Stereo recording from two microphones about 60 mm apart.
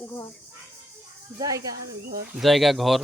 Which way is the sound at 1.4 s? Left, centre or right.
Right.